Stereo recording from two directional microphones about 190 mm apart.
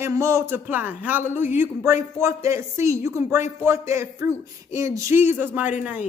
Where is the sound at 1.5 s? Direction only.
15° right (ahead or behind).